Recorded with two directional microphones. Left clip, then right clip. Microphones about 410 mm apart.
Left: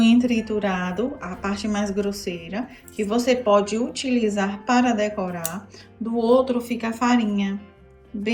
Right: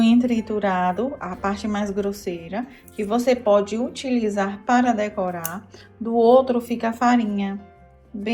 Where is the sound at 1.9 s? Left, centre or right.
Right.